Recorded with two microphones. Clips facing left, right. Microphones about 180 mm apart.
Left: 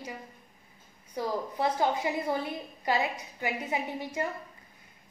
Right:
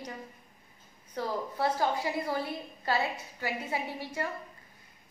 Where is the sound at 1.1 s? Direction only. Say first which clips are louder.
Left 2 dB; 15° left (ahead or behind).